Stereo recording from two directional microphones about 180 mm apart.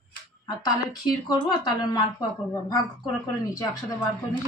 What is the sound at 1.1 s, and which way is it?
A woman's voice, 20° left (ahead or behind).